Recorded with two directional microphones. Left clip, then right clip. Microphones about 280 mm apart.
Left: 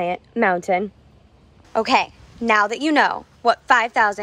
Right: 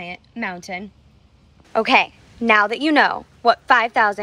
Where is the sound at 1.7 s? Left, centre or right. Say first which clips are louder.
Right 2 dB; centre.